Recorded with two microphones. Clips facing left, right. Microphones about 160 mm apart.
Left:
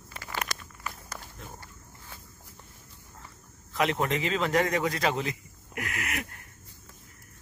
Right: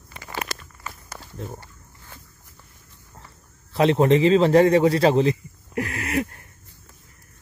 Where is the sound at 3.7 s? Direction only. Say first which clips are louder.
Right 10 dB; 30° right (ahead or behind).